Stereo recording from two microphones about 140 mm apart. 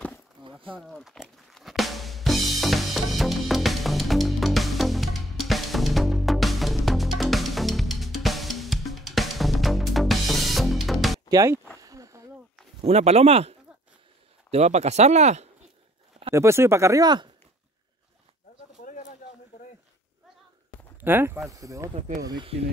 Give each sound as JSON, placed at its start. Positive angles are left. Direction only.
{"t": 0.4, "sound": "a sound", "side_deg": -35}
{"t": 0.7, "sound": "drum kit", "side_deg": 0}
{"t": 11.2, "sound": "speech", "side_deg": -25}
{"t": 11.8, "sound": "a sound", "side_deg": -25}
{"t": 12.8, "sound": "speech", "side_deg": -50}
{"t": 16.3, "sound": "speech", "side_deg": -20}
{"t": 21.0, "sound": "speech", "side_deg": -15}
{"t": 21.9, "sound": "speech", "side_deg": -60}
{"t": 22.2, "sound": "speech", "side_deg": -30}